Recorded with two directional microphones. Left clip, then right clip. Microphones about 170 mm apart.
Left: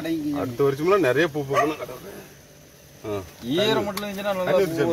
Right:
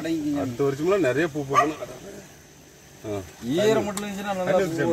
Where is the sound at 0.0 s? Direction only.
15° right (ahead or behind).